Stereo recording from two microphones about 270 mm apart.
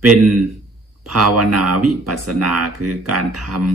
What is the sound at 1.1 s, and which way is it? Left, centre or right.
Speech, right.